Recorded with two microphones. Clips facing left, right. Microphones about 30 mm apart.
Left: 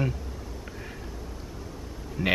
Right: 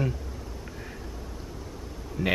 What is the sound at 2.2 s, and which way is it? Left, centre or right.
Speech, left.